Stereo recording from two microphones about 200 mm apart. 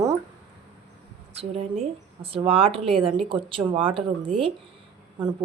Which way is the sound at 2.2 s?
30° right (ahead or behind).